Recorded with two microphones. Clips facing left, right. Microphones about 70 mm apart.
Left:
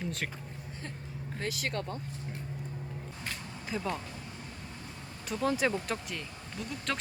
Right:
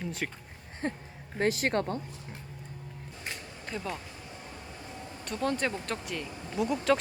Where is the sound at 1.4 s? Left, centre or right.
Right.